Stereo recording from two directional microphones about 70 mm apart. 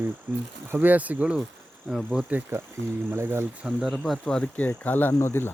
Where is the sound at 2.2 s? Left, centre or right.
Right.